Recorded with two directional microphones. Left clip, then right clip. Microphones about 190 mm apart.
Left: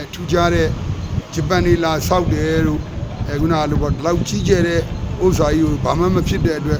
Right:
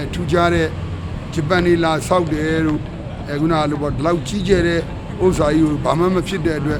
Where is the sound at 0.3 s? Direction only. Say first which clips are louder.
Even; centre (ahead or behind).